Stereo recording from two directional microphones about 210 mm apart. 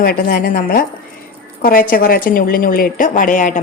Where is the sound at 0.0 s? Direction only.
45° left (ahead or behind).